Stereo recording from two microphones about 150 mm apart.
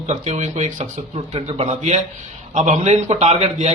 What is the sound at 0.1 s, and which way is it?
A man's voice, 45° right (ahead or behind).